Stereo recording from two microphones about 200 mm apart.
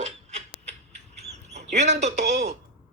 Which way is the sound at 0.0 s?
35° right (ahead or behind).